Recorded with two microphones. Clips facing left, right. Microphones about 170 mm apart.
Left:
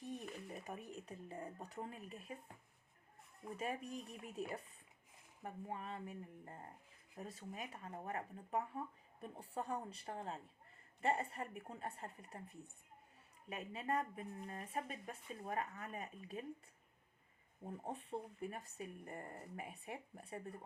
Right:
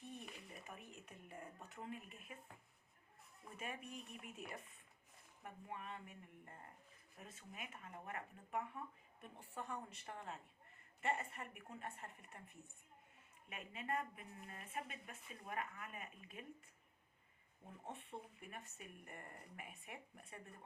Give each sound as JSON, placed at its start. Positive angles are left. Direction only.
{"t": 0.0, "sound": "speech", "side_deg": 40}
{"t": 3.6, "sound": "speech", "side_deg": 35}
{"t": 17.7, "sound": "speech", "side_deg": 35}